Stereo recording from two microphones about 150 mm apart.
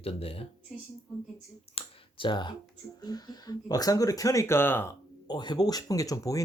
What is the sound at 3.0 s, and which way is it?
Speech, 25° left (ahead or behind).